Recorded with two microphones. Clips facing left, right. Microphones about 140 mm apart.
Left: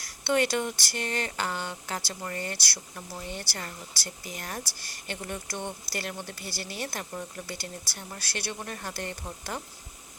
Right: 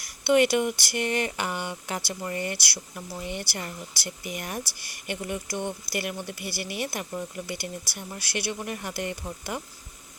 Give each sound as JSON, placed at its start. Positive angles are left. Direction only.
{"t": 0.0, "sound": "speech", "side_deg": -15}